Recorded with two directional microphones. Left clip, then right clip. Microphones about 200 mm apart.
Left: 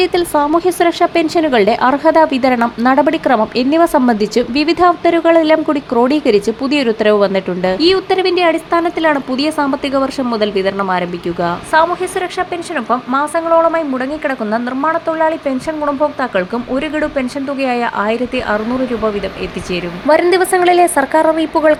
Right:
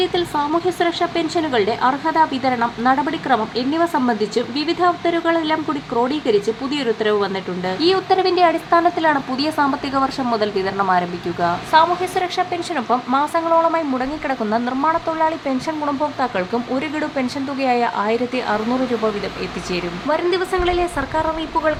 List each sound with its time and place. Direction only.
0.0 s speech: 30° left (ahead or behind)
7.8 s speech: 15° left (ahead or behind)
12.9 s speech: 15° left (ahead or behind)
17.0 s speech: 10° left (ahead or behind)
20.1 s speech: 30° left (ahead or behind)